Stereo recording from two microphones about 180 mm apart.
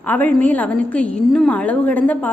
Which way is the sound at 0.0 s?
10° left (ahead or behind).